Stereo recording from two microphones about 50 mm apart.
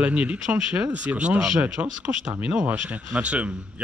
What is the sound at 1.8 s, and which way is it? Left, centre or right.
Speech, right.